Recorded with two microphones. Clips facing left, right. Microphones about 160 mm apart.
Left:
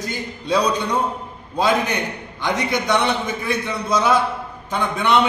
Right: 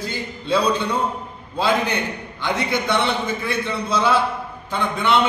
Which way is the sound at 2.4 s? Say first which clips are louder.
Left 1 dB; 15° left (ahead or behind).